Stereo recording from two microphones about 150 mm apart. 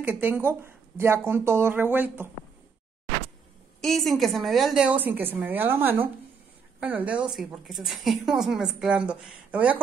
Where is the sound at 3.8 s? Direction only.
Centre (ahead or behind).